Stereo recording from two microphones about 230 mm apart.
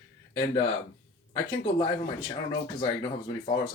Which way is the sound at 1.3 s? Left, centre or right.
Left.